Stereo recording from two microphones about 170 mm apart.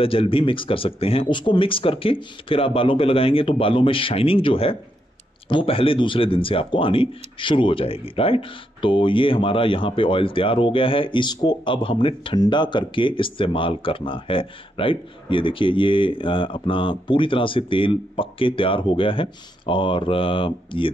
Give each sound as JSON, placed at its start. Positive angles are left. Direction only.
{"t": 0.0, "sound": "speech", "side_deg": 35}